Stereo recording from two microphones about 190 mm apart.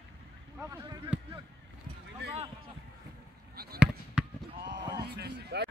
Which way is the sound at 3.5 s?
55° right (ahead or behind).